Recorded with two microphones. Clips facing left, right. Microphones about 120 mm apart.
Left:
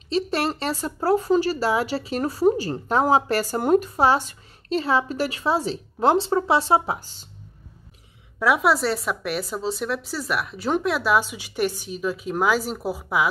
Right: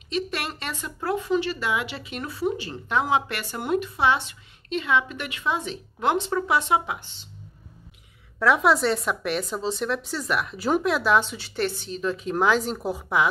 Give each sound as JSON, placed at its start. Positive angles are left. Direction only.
{"t": 0.1, "sound": "speech", "side_deg": 30}
{"t": 8.4, "sound": "a woman's voice", "side_deg": 5}